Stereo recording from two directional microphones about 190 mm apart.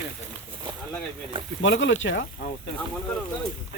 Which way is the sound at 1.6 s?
80° left.